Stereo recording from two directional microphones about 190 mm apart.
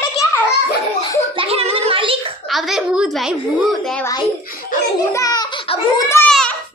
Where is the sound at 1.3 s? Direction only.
30° right (ahead or behind).